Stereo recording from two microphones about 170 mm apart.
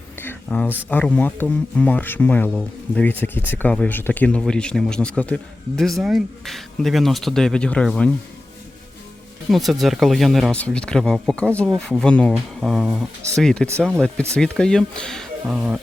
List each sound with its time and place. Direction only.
0.2 s a sound: 10° left (ahead or behind)
0.9 s speech: 10° left (ahead or behind)
9.5 s speech: centre (ahead or behind)
15.4 s speech: 5° right (ahead or behind)